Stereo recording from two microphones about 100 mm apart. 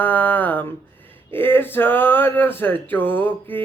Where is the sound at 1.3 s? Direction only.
20° left (ahead or behind).